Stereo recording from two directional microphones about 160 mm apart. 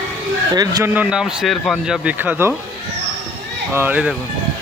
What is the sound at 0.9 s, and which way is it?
Speech, 10° right (ahead or behind).